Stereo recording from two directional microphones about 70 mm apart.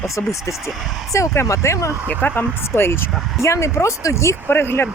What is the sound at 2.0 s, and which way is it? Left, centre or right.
Speech, left.